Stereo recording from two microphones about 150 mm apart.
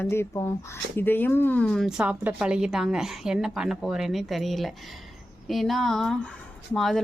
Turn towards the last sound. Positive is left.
turn(degrees=0)  # may be behind; listen again after turning